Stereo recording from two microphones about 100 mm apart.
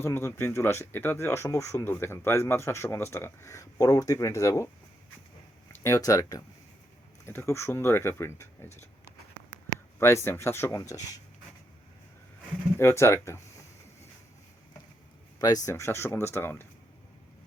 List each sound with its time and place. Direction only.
0.0 s speech: 25° left (ahead or behind)
5.8 s speech: 35° left (ahead or behind)
10.0 s speech: 25° left (ahead or behind)
12.7 s speech: 25° left (ahead or behind)
15.4 s speech: 40° left (ahead or behind); by 16.6 s 20° left (ahead or behind)